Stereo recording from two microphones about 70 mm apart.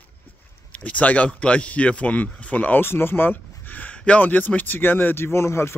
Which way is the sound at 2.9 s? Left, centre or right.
Left.